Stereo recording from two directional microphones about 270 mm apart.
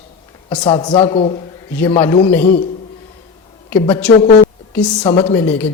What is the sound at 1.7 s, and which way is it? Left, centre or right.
Speech, centre.